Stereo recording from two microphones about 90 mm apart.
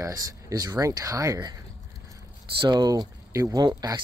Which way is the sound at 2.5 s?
55° right (ahead or behind).